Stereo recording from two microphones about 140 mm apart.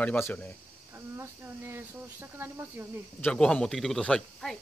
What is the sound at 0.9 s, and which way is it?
Speech, 15° right (ahead or behind).